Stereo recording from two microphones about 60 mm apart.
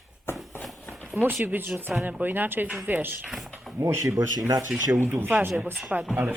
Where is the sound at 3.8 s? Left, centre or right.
Right.